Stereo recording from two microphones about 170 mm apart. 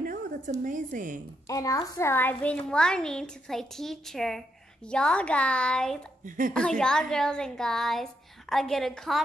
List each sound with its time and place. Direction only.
0.0 s a woman's voice: 50° right (ahead or behind)
1.5 s a child's voice: 20° left (ahead or behind); by 5.9 s 5° left (ahead or behind)
6.2 s a woman's voice: 50° right (ahead or behind)
6.5 s a child's voice: 5° left (ahead or behind)